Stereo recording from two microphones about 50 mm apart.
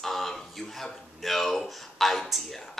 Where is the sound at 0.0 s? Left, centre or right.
Centre.